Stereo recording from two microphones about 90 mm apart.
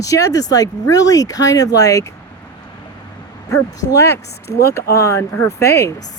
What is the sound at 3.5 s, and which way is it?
Speech, 35° left (ahead or behind).